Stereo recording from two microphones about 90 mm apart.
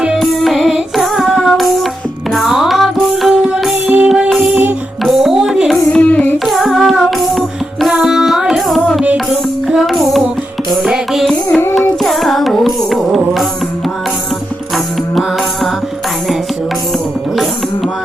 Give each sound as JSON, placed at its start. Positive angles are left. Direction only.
{"t": 0.0, "sound": "music", "side_deg": -5}
{"t": 3.8, "sound": "music", "side_deg": -20}
{"t": 4.3, "sound": "music", "side_deg": -5}
{"t": 5.9, "sound": "music", "side_deg": 15}
{"t": 6.4, "sound": "music", "side_deg": 0}